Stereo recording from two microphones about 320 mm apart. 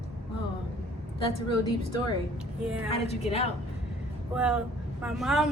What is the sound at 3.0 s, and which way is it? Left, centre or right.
Speech, centre.